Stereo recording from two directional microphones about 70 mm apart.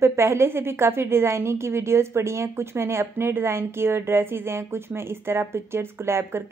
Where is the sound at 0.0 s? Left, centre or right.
Right.